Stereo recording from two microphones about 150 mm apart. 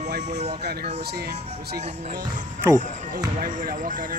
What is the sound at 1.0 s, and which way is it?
Speech, 90° right.